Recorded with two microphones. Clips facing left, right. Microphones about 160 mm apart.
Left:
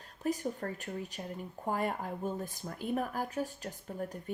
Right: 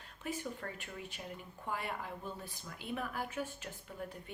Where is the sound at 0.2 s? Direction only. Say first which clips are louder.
Left 7 dB; 40° left (ahead or behind).